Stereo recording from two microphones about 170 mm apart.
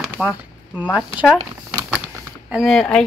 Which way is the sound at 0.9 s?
5° right (ahead or behind).